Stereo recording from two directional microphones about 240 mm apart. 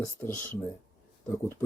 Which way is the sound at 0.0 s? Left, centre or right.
Centre.